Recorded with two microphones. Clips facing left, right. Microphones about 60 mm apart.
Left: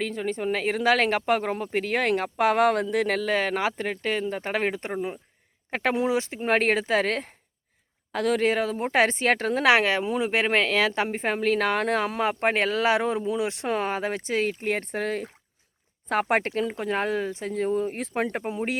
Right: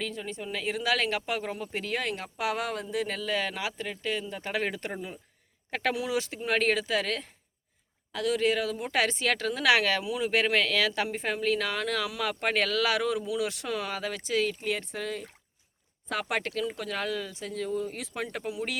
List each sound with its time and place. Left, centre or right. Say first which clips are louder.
0.0 s a woman's voice: left 8 dB; left